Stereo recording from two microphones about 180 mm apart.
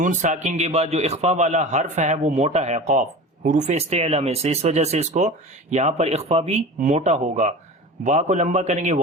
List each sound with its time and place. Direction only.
0.0 s a man's voice: 45° right (ahead or behind)